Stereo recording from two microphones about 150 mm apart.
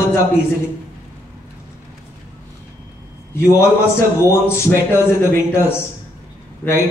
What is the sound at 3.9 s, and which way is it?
A man's voice, 15° left (ahead or behind).